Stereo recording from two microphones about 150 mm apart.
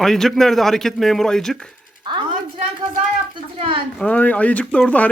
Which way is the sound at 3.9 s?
10° left (ahead or behind).